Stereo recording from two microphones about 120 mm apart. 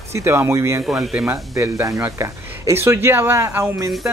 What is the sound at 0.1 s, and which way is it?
Speech, 20° right (ahead or behind).